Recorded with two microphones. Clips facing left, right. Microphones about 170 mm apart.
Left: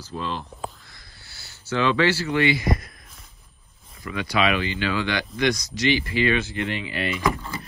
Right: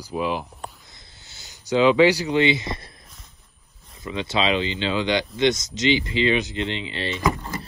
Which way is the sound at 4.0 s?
25° right (ahead or behind).